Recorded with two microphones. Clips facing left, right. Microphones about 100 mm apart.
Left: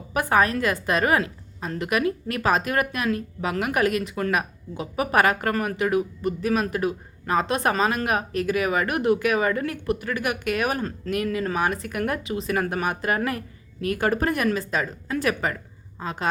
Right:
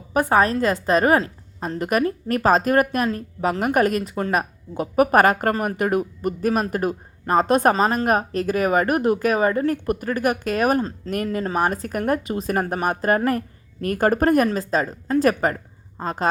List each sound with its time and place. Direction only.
0.1 s a woman's voice: 30° right (ahead or behind)
4.7 s speech: 50° right (ahead or behind)
7.7 s a woman's voice: 35° right (ahead or behind)
11.1 s a woman's voice: 40° right (ahead or behind)